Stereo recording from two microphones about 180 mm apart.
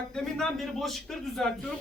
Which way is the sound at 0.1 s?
5° left (ahead or behind).